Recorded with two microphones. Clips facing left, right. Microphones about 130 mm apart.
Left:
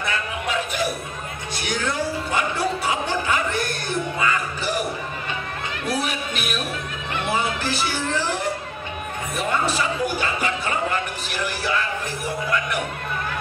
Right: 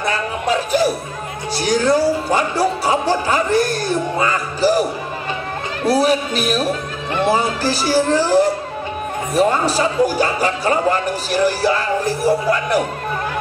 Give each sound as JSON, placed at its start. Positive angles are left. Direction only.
{"t": 0.0, "sound": "music", "side_deg": -35}
{"t": 1.5, "sound": "speech", "side_deg": -35}
{"t": 5.9, "sound": "speech", "side_deg": -35}